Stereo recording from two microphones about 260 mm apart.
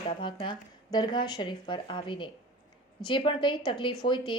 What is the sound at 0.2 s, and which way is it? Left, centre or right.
A woman's voice, centre.